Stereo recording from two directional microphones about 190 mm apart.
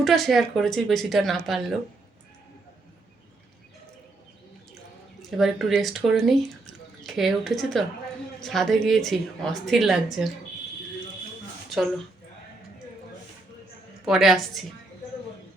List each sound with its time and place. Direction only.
0.0 s a woman's voice: centre (ahead or behind)
5.4 s a woman's voice: centre (ahead or behind)
14.0 s a woman's voice: centre (ahead or behind)